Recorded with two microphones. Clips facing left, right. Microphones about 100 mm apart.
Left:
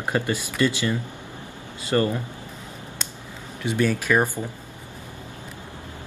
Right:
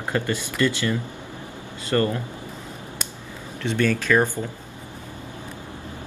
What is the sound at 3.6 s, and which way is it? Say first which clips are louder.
Speech: right 1 dB; 10° left (ahead or behind).